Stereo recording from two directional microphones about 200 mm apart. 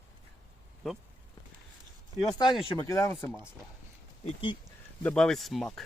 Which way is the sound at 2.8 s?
15° left (ahead or behind).